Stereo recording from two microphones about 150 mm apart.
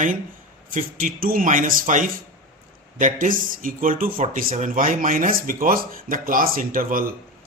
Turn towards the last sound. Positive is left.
turn(degrees=-70)  # may be behind; listen again after turning